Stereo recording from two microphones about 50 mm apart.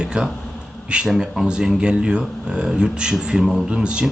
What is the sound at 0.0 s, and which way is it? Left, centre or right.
A man's voice, centre.